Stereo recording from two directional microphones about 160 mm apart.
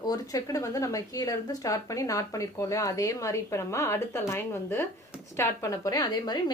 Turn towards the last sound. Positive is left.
turn(degrees=25)  # may be behind; listen again after turning